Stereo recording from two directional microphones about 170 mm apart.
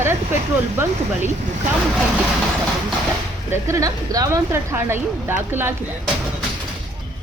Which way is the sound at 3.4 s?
15° right (ahead or behind).